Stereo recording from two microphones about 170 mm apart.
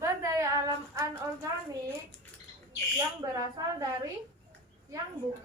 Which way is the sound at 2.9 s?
20° right (ahead or behind).